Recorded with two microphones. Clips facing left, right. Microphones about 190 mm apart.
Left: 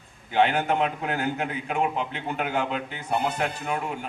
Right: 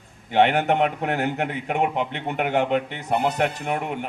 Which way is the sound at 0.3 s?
70° right (ahead or behind).